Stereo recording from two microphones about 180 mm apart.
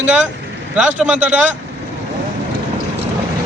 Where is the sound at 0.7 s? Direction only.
5° right (ahead or behind).